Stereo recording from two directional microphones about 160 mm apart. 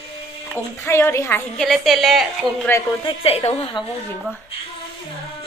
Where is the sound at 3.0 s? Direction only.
35° left (ahead or behind).